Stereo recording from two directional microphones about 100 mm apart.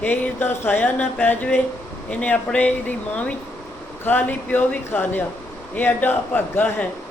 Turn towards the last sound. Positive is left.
turn(degrees=20)  # may be behind; listen again after turning